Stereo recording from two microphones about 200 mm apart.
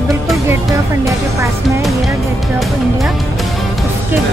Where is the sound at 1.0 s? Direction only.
15° right (ahead or behind).